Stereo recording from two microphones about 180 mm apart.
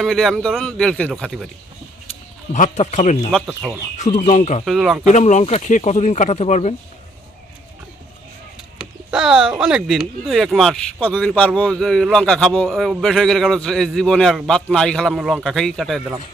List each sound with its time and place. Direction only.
0.0 s speech: centre (ahead or behind)
2.5 s speech: 40° left (ahead or behind)
3.3 s speech: 5° right (ahead or behind)
3.9 s speech: 40° left (ahead or behind)
4.6 s speech: centre (ahead or behind)
5.0 s speech: 40° left (ahead or behind)
9.0 s speech: 5° right (ahead or behind)